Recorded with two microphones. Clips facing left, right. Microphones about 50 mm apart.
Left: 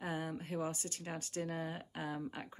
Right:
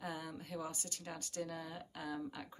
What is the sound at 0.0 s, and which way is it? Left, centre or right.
Speech, left.